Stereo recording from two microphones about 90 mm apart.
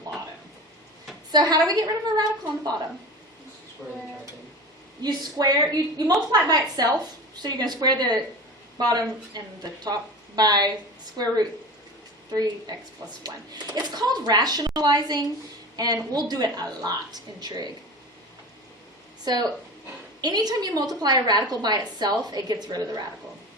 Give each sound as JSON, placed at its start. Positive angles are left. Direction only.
{"t": 1.3, "sound": "speech", "side_deg": -45}
{"t": 5.0, "sound": "a woman's voice", "side_deg": -45}
{"t": 12.3, "sound": "speech", "side_deg": -45}
{"t": 19.2, "sound": "speech", "side_deg": -50}